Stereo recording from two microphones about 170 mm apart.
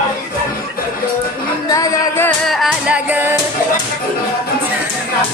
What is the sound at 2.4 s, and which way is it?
Music, centre (ahead or behind).